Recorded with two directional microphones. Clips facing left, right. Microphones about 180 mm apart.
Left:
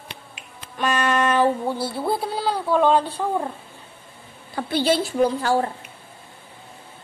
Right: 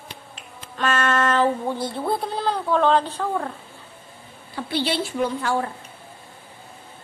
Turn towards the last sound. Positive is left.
turn(degrees=35)  # may be behind; listen again after turning